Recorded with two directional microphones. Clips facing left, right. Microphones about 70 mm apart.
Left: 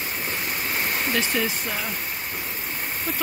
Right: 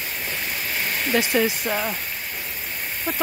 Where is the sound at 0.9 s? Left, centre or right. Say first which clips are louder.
Right 1 dB; left.